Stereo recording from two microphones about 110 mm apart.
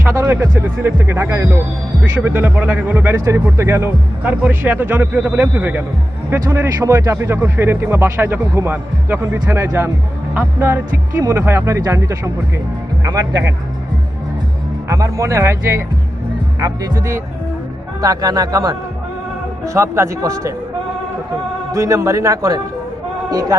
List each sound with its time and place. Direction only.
0.0 s music: 20° right (ahead or behind)
0.6 s speech: 20° right (ahead or behind); by 13.5 s 35° right (ahead or behind)
14.8 s speech: 25° right (ahead or behind)
21.7 s speech: 30° right (ahead or behind)